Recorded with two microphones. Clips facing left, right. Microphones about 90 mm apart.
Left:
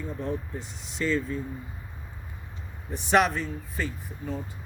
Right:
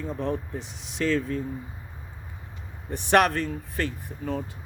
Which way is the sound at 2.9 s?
65° right (ahead or behind).